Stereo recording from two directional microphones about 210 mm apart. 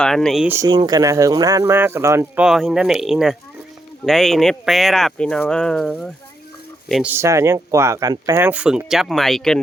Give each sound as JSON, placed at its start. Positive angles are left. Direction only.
{"t": 0.0, "sound": "speech", "side_deg": 0}
{"t": 0.7, "sound": "speech", "side_deg": -20}
{"t": 7.1, "sound": "speech", "side_deg": -15}